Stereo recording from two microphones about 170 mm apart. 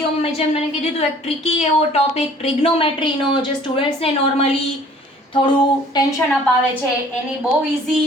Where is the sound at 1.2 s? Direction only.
40° left (ahead or behind).